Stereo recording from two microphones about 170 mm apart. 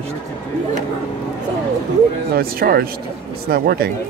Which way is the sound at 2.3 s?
60° right (ahead or behind).